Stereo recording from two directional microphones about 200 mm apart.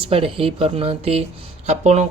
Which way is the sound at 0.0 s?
30° right (ahead or behind).